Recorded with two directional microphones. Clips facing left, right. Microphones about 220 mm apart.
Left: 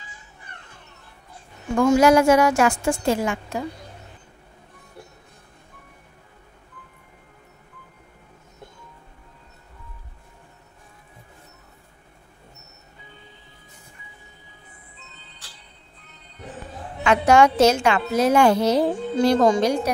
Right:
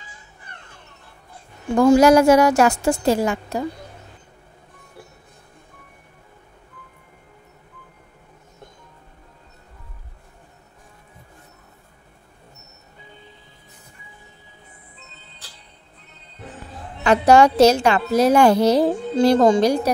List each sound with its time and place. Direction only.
1.8 s a woman's voice: 35° right (ahead or behind)
17.0 s a woman's voice: 35° right (ahead or behind)